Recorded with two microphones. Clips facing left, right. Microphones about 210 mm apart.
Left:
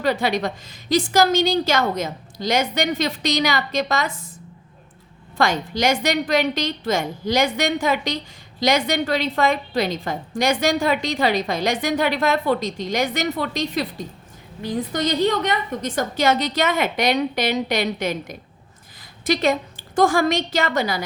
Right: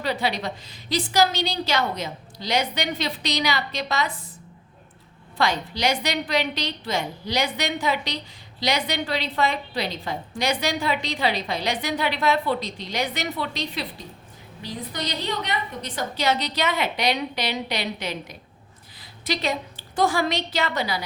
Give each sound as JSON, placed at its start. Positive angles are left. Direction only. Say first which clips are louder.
{"t": 0.0, "sound": "a woman's voice", "louder": "left 5 dB", "side_deg": 50}
{"t": 5.4, "sound": "a woman's voice", "louder": "left 3 dB", "side_deg": 50}